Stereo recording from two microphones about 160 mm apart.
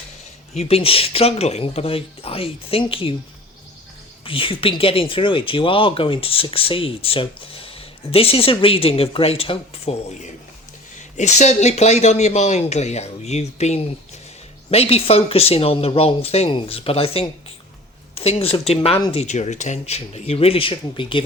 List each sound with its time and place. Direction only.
0.5 s speech: 40° left (ahead or behind)
4.2 s speech: 35° left (ahead or behind)